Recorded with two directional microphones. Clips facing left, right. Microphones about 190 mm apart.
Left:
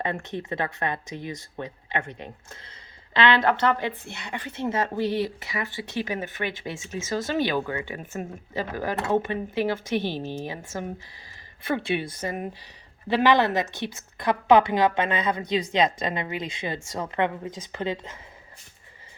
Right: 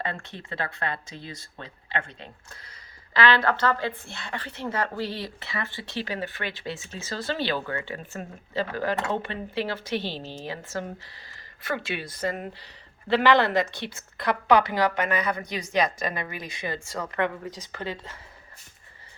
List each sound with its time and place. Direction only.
0.0 s speech: 20° left (ahead or behind)
10.0 s speech: 50° left (ahead or behind)
10.3 s speech: 15° left (ahead or behind)
13.1 s speech: 15° left (ahead or behind)